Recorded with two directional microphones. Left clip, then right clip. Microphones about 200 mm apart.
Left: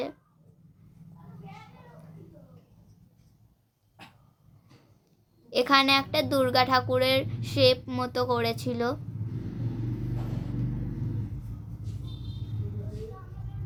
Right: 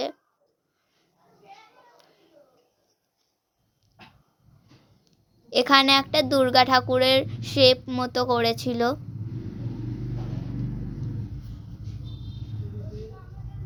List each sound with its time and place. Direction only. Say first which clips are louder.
5.5 s speech: right 4 dB; 30° right (ahead or behind)